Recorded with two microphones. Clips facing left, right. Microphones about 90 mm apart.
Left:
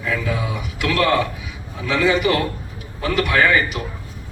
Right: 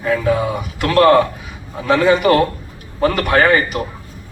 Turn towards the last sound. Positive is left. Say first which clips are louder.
# right 4 dB
turn(degrees=-45)  # may be behind; listen again after turning